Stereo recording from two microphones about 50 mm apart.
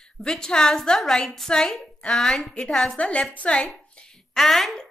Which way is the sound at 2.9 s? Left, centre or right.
Left.